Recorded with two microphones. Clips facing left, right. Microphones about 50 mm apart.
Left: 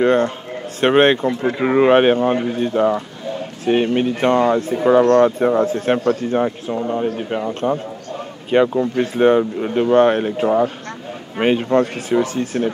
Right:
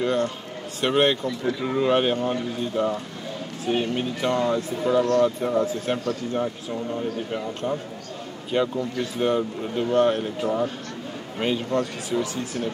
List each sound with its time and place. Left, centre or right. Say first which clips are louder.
0.0 s speech: left 8 dB; left